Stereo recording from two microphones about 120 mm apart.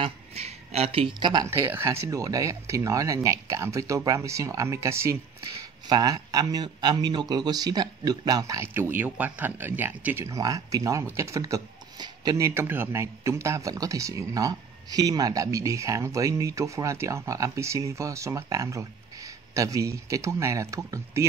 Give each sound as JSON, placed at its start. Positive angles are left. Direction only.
{"t": 0.0, "sound": "speech", "side_deg": -60}
{"t": 1.4, "sound": "a man's voice", "side_deg": -20}
{"t": 5.9, "sound": "speech", "side_deg": -35}
{"t": 8.7, "sound": "a man's voice", "side_deg": -20}
{"t": 12.4, "sound": "a man's voice", "side_deg": -20}